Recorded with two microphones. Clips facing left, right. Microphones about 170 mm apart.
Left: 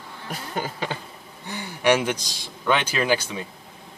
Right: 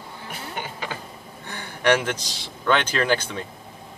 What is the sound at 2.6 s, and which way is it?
Speech, 10° left (ahead or behind).